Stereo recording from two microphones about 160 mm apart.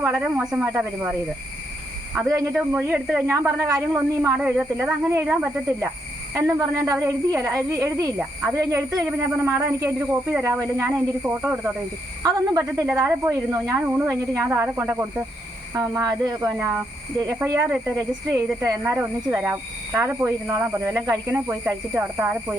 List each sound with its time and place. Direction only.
0.0 s speech: 10° right (ahead or behind)
2.3 s a woman's voice: 20° right (ahead or behind)
6.3 s a woman's voice: 20° right (ahead or behind)
12.2 s a woman's voice: 20° right (ahead or behind)